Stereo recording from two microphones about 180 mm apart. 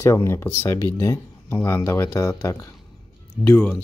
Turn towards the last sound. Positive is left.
turn(degrees=10)  # may be behind; listen again after turning